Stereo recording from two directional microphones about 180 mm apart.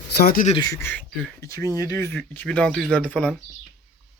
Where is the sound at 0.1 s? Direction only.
55° left (ahead or behind).